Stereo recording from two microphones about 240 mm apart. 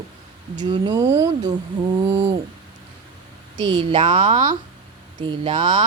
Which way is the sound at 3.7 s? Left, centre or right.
Right.